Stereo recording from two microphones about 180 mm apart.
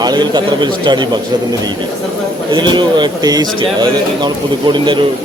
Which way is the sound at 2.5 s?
25° right (ahead or behind).